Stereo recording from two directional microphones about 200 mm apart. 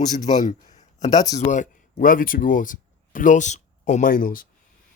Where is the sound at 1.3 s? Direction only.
35° left (ahead or behind).